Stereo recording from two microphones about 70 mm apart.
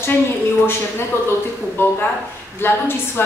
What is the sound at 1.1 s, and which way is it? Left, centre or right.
Speech, left.